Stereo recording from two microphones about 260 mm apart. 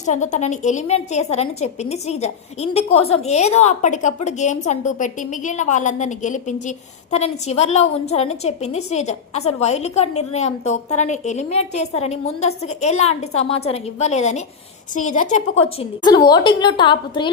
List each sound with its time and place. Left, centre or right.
0.0 s a woman's voice: left
15.8 s a woman's voice: centre